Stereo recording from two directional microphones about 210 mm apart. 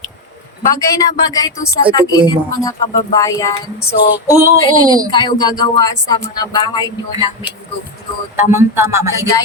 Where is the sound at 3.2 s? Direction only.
15° left (ahead or behind).